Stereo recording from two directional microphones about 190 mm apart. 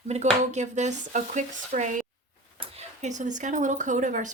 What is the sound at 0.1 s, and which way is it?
Speech, 40° right (ahead or behind).